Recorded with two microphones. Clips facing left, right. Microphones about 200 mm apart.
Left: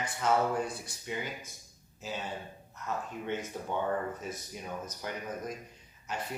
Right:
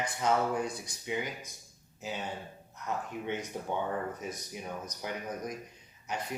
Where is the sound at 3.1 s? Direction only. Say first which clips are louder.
Even; 15° right (ahead or behind).